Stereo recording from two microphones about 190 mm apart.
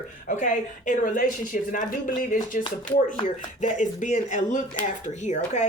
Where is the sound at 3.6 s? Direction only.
40° left (ahead or behind).